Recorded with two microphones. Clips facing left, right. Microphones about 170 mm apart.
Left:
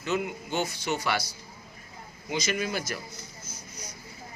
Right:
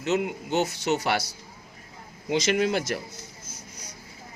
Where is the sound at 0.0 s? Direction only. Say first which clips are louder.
Right 4 dB; 70° right (ahead or behind).